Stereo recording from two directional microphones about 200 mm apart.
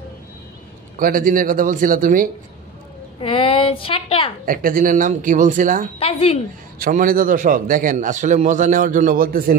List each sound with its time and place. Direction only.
0.9 s a man's voice: 45° right (ahead or behind)
3.2 s speech: 25° left (ahead or behind)
4.5 s a man's voice: 45° right (ahead or behind)
5.9 s speech: 30° left (ahead or behind)
6.8 s a man's voice: 45° right (ahead or behind)